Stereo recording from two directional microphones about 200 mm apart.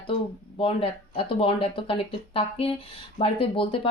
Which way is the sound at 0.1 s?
25° left (ahead or behind).